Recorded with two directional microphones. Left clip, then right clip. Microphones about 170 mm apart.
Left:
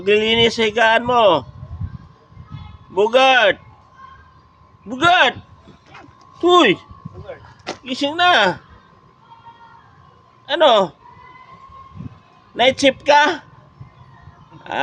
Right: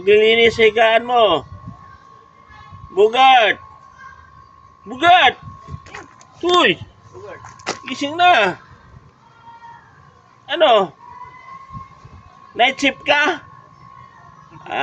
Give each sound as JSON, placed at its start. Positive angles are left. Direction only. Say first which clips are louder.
{"t": 0.0, "sound": "a man's voice", "louder": "right 3 dB", "side_deg": 30}
{"t": 2.9, "sound": "a man's voice", "louder": "right 2 dB", "side_deg": 30}
{"t": 4.9, "sound": "a man's voice", "louder": "right 2 dB", "side_deg": 30}
{"t": 6.4, "sound": "a man's voice", "louder": "left 2 dB", "side_deg": 35}
{"t": 7.9, "sound": "speech", "louder": "right 1 dB", "side_deg": 25}
{"t": 10.4, "sound": "speech", "louder": "even", "side_deg": 25}
{"t": 12.5, "sound": "speech", "louder": "left 1 dB", "side_deg": 25}